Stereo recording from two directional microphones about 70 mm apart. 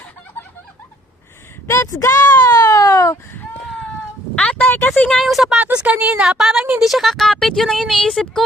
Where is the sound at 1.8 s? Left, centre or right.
Left.